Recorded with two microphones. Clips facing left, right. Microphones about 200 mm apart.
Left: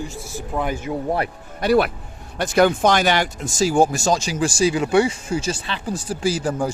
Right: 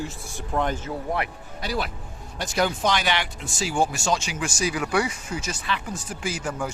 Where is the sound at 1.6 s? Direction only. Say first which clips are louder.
Left 12 dB; 60° left (ahead or behind).